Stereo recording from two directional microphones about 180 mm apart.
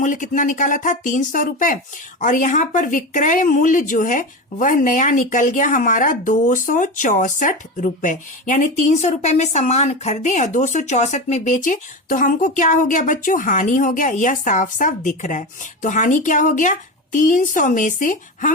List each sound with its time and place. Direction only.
0.0 s speech: 45° left (ahead or behind)